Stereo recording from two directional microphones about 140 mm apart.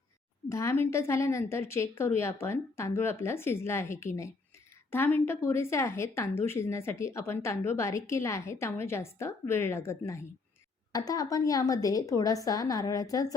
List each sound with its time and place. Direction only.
0.4 s speech: 20° left (ahead or behind)